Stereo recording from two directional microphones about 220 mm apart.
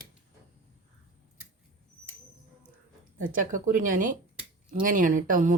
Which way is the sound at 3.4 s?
35° right (ahead or behind).